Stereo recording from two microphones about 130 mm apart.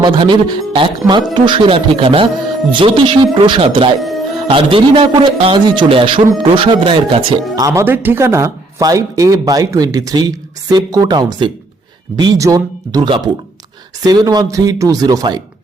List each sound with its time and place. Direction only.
0.0 s speech: 35° right (ahead or behind)
7.6 s speech: 20° right (ahead or behind)